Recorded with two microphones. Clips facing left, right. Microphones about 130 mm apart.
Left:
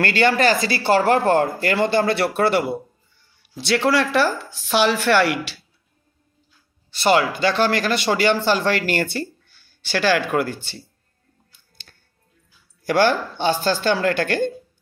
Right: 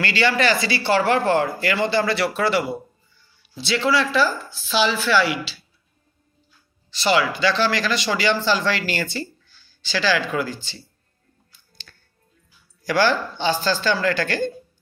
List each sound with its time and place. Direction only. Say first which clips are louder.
0.0 s speech: left 3 dB; 50° left (ahead or behind)
6.9 s speech: left 2 dB; 55° left (ahead or behind)
11.5 s music: right 3 dB; 55° left (ahead or behind)
12.8 s speech: left 2 dB; 55° left (ahead or behind)